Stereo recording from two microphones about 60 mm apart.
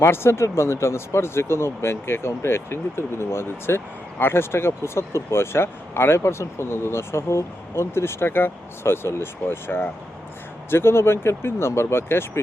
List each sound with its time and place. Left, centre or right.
0.0 s speech: left